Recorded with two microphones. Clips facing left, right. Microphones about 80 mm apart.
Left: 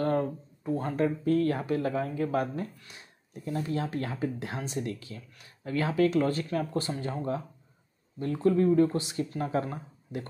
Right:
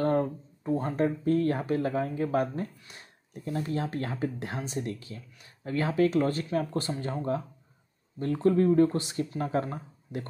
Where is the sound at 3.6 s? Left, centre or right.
Right.